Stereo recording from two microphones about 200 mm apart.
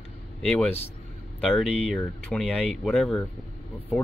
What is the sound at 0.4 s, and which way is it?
Speech, 5° left (ahead or behind).